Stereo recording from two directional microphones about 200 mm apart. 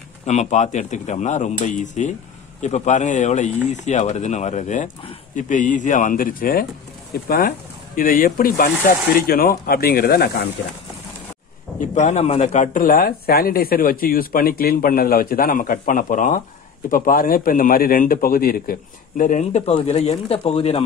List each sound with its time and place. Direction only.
0.3 s a man's voice: 35° left (ahead or behind); by 10.5 s 50° left (ahead or behind)
11.8 s a man's voice: 35° left (ahead or behind)